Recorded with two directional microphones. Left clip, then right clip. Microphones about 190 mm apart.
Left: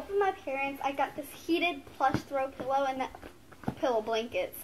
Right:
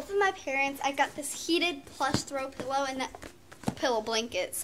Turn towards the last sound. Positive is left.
turn(degrees=-10)  # may be behind; listen again after turning